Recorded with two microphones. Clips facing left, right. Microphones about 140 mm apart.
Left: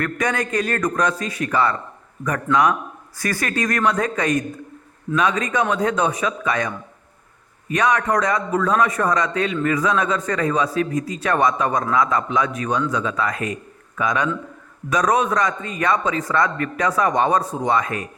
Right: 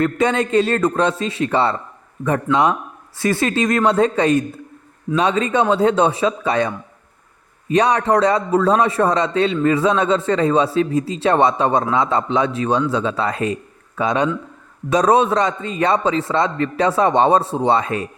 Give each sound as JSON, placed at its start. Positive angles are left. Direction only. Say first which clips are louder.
{"t": 0.0, "sound": "a man's voice", "louder": "right 5 dB", "side_deg": -25}